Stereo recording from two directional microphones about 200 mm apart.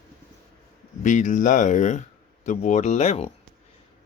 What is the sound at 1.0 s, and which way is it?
Speech, 40° left (ahead or behind).